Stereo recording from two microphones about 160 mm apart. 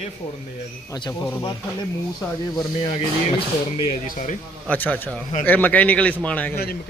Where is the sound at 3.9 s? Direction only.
50° left (ahead or behind).